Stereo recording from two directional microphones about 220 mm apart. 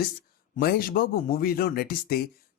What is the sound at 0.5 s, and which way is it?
Speech, 45° left (ahead or behind).